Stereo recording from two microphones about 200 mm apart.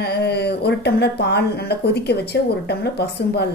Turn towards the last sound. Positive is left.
turn(degrees=55)  # may be behind; listen again after turning